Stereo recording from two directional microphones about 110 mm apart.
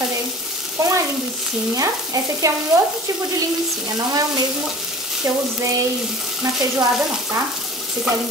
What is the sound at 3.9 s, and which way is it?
Frying, 35° right (ahead or behind).